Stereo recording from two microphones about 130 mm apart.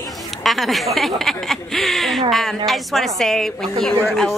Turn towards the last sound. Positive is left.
turn(degrees=0)  # may be behind; listen again after turning